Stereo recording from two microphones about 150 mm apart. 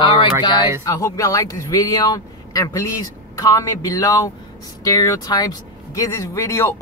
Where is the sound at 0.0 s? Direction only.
30° left (ahead or behind).